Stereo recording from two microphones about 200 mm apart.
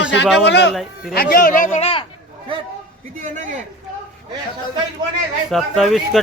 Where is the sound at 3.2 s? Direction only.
40° right (ahead or behind).